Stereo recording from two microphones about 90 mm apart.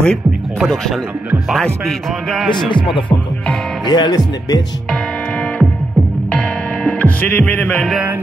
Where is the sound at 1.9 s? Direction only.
Centre (ahead or behind).